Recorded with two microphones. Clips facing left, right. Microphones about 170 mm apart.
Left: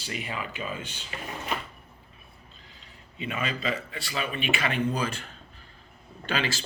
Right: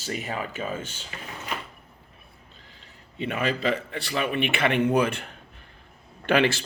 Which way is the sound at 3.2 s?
60° right (ahead or behind).